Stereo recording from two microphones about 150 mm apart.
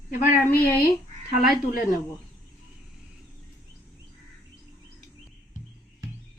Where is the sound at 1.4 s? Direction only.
80° left.